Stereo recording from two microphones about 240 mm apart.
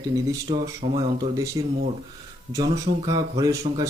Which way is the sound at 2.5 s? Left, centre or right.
Centre.